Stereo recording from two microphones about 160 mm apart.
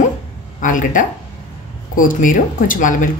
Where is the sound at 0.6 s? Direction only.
55° left (ahead or behind).